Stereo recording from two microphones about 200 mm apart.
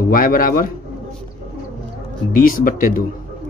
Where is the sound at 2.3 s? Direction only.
45° left (ahead or behind).